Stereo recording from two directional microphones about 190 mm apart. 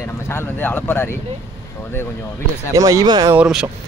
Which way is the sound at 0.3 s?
10° left (ahead or behind).